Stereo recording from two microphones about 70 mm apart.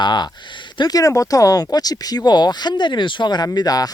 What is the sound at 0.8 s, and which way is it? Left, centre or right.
Speech, left.